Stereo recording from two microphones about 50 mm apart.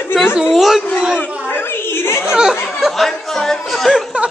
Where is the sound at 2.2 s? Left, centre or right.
Centre.